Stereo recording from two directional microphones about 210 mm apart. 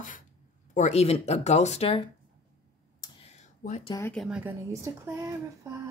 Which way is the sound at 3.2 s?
30° left (ahead or behind).